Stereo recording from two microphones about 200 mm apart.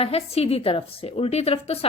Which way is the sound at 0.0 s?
30° left (ahead or behind).